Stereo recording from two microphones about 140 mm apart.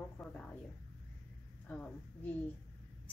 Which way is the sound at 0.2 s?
15° left (ahead or behind).